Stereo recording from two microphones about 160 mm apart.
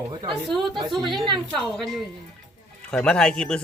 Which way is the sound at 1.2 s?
30° right (ahead or behind).